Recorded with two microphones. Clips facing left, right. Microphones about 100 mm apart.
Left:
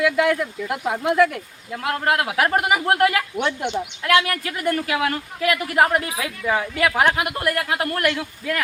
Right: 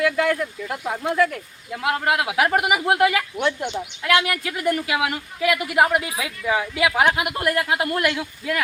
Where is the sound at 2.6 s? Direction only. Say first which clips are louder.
Even; 10° right (ahead or behind).